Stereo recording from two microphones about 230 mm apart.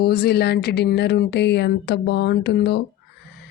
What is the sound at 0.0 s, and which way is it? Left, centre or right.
Speech, left.